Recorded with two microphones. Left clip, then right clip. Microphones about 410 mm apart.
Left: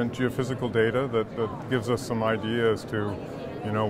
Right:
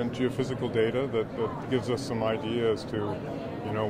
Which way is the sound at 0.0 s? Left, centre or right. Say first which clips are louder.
Left 1 dB; left.